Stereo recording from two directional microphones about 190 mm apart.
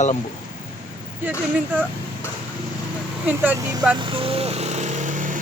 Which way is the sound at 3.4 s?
15° right (ahead or behind).